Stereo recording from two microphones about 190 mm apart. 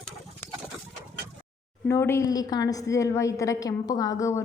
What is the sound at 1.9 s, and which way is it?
A woman's voice, 15° left (ahead or behind).